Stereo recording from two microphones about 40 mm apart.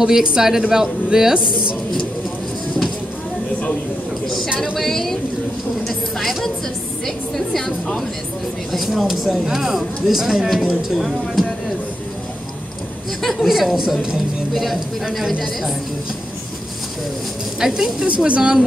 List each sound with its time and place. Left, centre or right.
0.0 s a woman's voice: centre
4.7 s a sound: centre
8.7 s speech: centre
13.2 s speech: centre
17.6 s speech: centre
18.0 s speech: right